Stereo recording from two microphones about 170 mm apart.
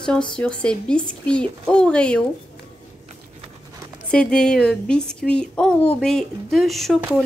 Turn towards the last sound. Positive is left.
turn(degrees=0)  # may be behind; listen again after turning